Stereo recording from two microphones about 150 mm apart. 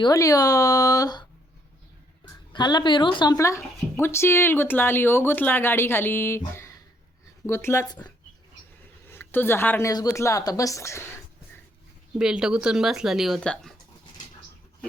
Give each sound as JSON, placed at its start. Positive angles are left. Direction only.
{"t": 0.0, "sound": "speech", "side_deg": 20}
{"t": 2.5, "sound": "a woman's voice", "side_deg": 30}
{"t": 3.3, "sound": "a woman's voice", "side_deg": 20}
{"t": 12.2, "sound": "speech", "side_deg": -5}